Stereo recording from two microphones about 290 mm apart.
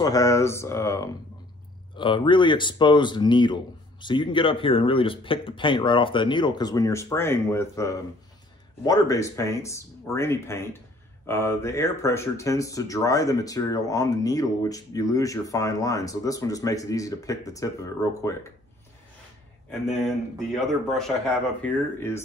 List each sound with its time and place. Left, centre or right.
0.0 s speech: centre
19.7 s speech: centre